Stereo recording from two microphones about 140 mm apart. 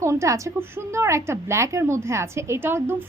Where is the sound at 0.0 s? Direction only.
20° right (ahead or behind).